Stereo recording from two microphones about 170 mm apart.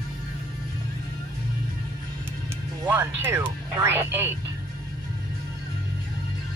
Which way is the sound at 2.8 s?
10° right (ahead or behind).